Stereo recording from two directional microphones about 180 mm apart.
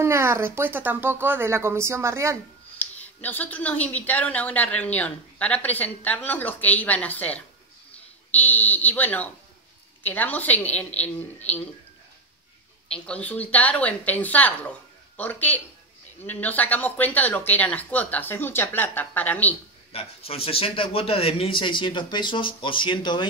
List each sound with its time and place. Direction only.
0.0 s speech: 15° right (ahead or behind)
2.8 s speech: 10° left (ahead or behind)
12.9 s speech: 5° left (ahead or behind)
19.9 s speech: 35° left (ahead or behind)